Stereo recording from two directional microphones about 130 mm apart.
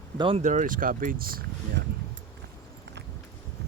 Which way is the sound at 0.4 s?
75° right (ahead or behind).